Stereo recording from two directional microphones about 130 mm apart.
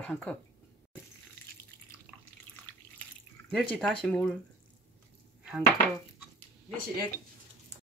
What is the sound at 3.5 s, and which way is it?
Speech, 5° left (ahead or behind).